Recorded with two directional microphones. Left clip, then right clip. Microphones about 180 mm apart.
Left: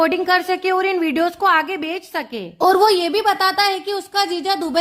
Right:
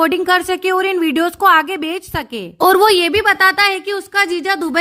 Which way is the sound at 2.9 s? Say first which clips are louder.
Right 4 dB; 25° right (ahead or behind).